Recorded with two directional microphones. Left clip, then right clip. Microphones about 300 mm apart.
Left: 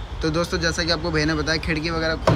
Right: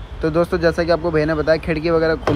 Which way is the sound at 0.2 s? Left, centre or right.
Centre.